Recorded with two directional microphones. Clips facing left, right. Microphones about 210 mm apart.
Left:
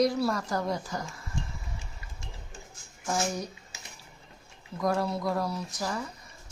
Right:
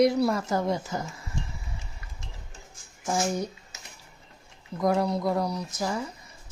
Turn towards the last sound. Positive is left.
turn(degrees=-20)  # may be behind; listen again after turning